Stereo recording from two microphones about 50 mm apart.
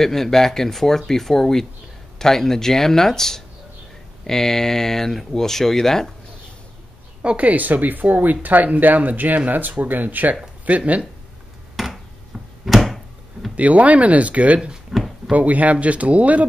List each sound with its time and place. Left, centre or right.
0.0 s speech: centre
7.2 s speech: right
11.7 s a sound: centre
12.6 s door: centre
13.6 s speech: right
14.9 s a sound: centre
15.3 s speech: right